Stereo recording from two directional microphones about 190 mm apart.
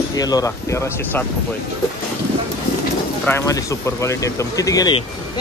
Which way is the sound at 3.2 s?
15° left (ahead or behind).